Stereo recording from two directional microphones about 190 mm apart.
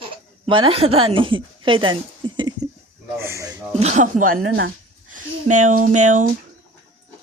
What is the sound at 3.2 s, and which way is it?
Speech, 15° right (ahead or behind).